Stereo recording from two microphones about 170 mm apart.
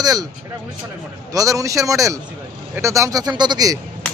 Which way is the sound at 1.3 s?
20° right (ahead or behind).